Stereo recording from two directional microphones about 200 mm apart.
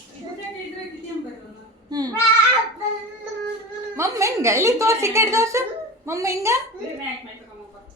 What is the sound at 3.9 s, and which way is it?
A woman's voice, 15° right (ahead or behind).